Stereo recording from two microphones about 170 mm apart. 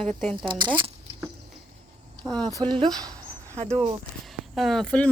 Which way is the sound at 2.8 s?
25° right (ahead or behind).